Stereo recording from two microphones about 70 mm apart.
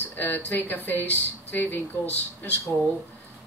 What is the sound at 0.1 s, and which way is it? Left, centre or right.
Speech, left.